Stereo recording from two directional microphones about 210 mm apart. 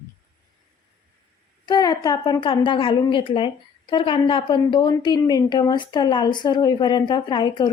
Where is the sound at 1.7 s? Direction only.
20° left (ahead or behind).